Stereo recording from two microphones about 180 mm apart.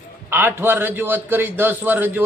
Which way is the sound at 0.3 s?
10° right (ahead or behind).